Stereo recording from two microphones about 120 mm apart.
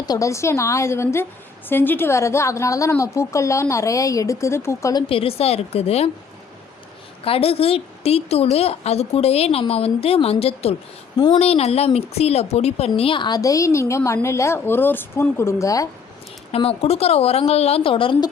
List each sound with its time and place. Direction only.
0.0 s a woman's voice: 30° left (ahead or behind)
5.0 s a woman's voice: 50° left (ahead or behind)
7.3 s a woman's voice: 55° left (ahead or behind)
13.0 s a woman's voice: 45° left (ahead or behind); by 15.9 s 25° left (ahead or behind)
16.5 s a woman's voice: 55° left (ahead or behind)